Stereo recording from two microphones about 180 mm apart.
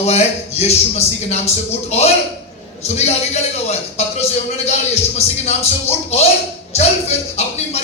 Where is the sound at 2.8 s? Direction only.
35° left (ahead or behind).